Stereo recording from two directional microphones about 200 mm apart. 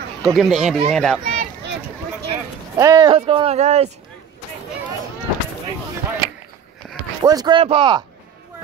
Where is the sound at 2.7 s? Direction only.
15° right (ahead or behind); by 3.8 s 30° right (ahead or behind).